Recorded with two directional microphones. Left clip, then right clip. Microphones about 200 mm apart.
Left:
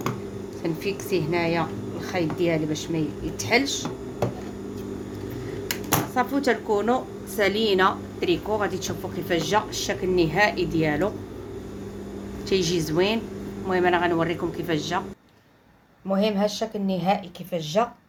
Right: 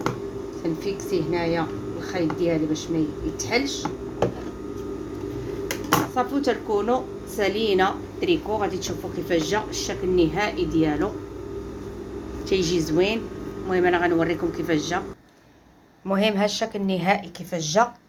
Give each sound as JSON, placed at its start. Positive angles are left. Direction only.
{"t": 0.9, "sound": "a woman's voice", "side_deg": 40}
{"t": 6.1, "sound": "a woman's voice", "side_deg": 35}
{"t": 12.5, "sound": "a woman's voice", "side_deg": 30}
{"t": 16.0, "sound": "a woman's voice", "side_deg": -5}